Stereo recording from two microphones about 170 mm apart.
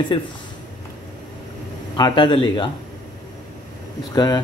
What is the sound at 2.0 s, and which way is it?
Speech, 25° left (ahead or behind).